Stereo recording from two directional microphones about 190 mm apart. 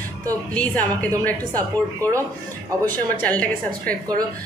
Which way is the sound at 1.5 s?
15° right (ahead or behind).